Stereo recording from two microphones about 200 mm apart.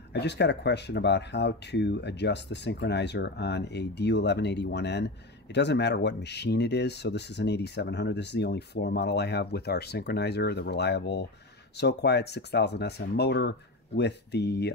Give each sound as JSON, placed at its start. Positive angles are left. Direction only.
{"t": 0.1, "sound": "speech", "side_deg": 60}